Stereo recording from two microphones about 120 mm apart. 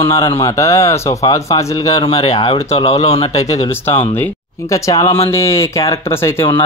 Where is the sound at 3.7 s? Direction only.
20° left (ahead or behind).